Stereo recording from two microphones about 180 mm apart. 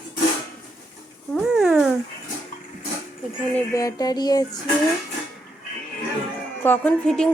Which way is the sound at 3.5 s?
15° left (ahead or behind).